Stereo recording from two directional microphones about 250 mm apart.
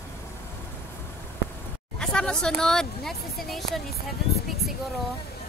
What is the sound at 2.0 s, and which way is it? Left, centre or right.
Speech, centre.